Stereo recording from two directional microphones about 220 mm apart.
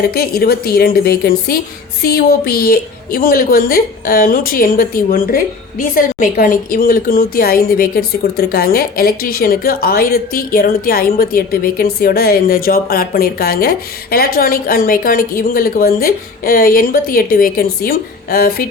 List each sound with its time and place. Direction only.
0.1 s a woman's voice: 45° left (ahead or behind)